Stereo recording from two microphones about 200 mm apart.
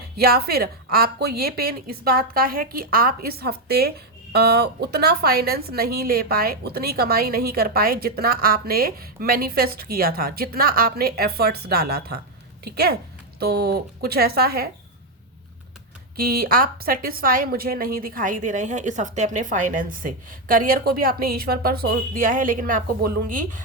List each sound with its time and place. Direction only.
0.2 s a woman's voice: 50° right (ahead or behind)
16.1 s a woman's voice: 45° right (ahead or behind)